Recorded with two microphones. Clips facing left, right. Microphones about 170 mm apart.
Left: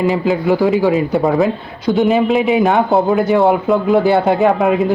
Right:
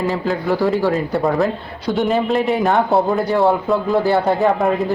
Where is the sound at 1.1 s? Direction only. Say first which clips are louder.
Left 3 dB; centre (ahead or behind).